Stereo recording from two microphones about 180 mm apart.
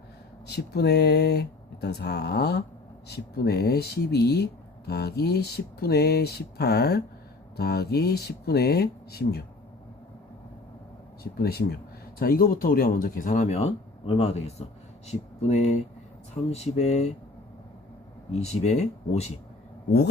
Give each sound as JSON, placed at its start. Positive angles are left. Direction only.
{"t": 0.4, "sound": "speech", "side_deg": 65}
{"t": 11.2, "sound": "speech", "side_deg": 60}
{"t": 18.3, "sound": "speech", "side_deg": 40}